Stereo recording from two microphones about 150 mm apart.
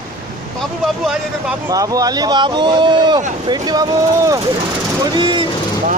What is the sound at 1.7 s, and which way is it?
Speech, 25° right (ahead or behind).